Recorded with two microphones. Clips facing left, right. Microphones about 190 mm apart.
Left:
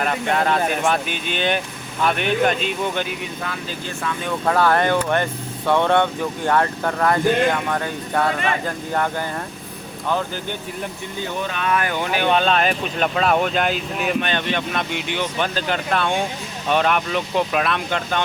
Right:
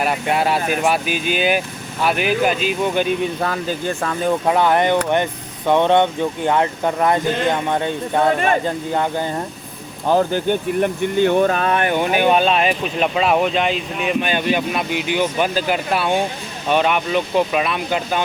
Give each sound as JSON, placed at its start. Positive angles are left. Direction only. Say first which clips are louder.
{"t": 0.0, "sound": "speech", "louder": "right 2 dB", "side_deg": -10}
{"t": 3.4, "sound": "speech", "louder": "right 8 dB", "side_deg": -45}
{"t": 4.4, "sound": "speech", "louder": "even", "side_deg": -20}
{"t": 10.5, "sound": "speech", "louder": "right 11 dB", "side_deg": -65}
{"t": 11.8, "sound": "speech", "louder": "right 5 dB", "side_deg": -20}